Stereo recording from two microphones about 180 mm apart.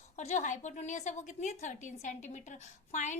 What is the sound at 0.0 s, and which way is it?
A woman's voice, 40° left (ahead or behind).